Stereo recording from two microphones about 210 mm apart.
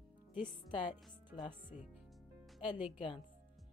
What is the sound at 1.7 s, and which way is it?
Speech, 30° left (ahead or behind).